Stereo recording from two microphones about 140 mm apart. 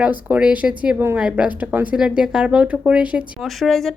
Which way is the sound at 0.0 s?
10° right (ahead or behind).